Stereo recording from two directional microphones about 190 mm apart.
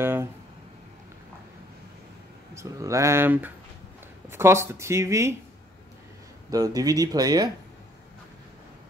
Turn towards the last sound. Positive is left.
turn(degrees=-20)  # may be behind; listen again after turning